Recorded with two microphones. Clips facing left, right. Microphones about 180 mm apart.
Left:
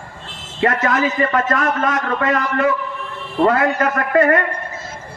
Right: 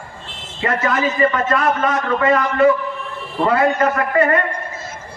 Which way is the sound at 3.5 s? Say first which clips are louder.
Right 2 dB; 45° left (ahead or behind).